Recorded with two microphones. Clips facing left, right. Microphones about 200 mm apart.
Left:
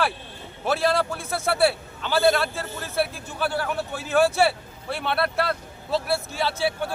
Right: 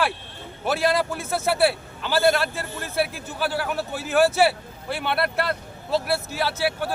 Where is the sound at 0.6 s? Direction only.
Centre (ahead or behind).